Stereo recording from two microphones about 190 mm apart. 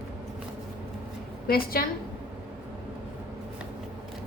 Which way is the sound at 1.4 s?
50° left (ahead or behind).